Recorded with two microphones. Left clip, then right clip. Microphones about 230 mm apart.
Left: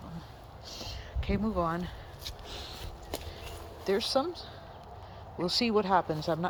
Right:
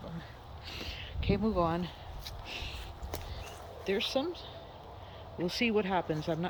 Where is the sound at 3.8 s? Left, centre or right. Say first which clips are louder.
Left 3 dB; left.